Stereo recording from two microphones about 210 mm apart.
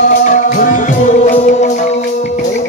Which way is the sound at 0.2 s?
35° left (ahead or behind).